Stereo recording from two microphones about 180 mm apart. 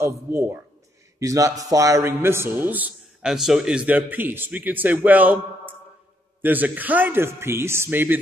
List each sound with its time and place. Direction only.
0.0 s a man's voice: 15° right (ahead or behind)
6.4 s a man's voice: 10° right (ahead or behind)